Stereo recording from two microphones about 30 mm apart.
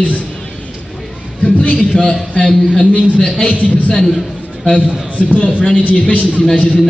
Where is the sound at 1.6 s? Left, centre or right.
Left.